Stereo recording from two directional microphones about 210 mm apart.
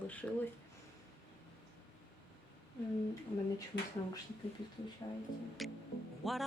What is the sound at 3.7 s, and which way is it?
Speech, 55° left (ahead or behind).